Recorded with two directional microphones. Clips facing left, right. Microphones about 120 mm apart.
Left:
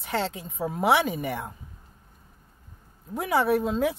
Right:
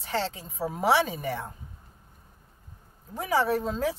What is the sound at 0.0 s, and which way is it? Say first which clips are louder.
A woman's voice: left 1 dB; 5° left (ahead or behind).